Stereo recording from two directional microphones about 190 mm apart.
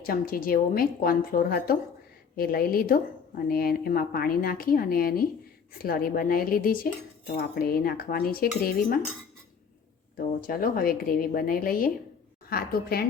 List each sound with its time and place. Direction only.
0.0 s speech: 50° left (ahead or behind)
10.2 s speech: 50° left (ahead or behind)